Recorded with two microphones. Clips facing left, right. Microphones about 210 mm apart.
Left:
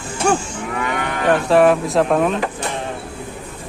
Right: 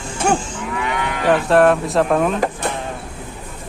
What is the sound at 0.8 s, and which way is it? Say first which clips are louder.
Livestock: right 1 dB; 50° left (ahead or behind).